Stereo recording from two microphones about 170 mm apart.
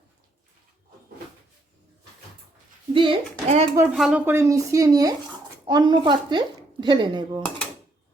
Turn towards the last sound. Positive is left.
turn(degrees=-25)  # may be behind; listen again after turning